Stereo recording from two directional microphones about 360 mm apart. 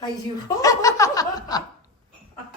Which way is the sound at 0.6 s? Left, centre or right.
Centre.